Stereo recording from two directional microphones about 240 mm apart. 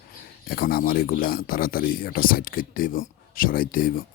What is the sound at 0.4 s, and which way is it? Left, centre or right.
Speech, left.